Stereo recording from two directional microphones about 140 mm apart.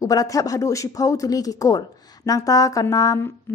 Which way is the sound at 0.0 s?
25° left (ahead or behind).